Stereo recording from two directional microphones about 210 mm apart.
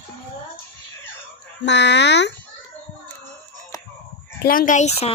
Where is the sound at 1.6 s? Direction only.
55° left (ahead or behind).